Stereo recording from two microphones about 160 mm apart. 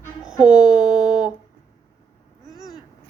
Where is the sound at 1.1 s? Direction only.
55° right (ahead or behind).